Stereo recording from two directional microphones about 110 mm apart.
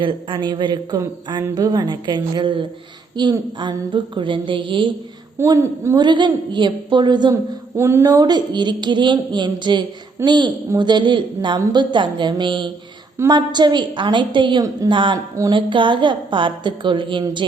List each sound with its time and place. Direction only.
0.0 s a man's voice: 50° right (ahead or behind)
5.5 s a woman's voice: 25° right (ahead or behind)
6.0 s a man's voice: 45° right (ahead or behind)
7.8 s a man's voice: 25° right (ahead or behind); by 14.6 s 45° right (ahead or behind)
14.6 s a woman's voice: 35° right (ahead or behind)
14.9 s a man's voice: 50° right (ahead or behind)